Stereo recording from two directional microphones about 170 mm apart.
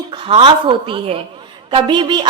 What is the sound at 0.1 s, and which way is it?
A woman's voice, 35° right (ahead or behind).